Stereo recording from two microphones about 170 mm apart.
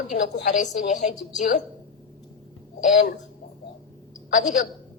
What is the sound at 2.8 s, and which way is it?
Speech, 50° left (ahead or behind).